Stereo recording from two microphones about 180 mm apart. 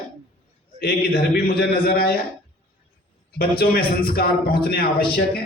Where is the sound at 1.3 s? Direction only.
55° left (ahead or behind).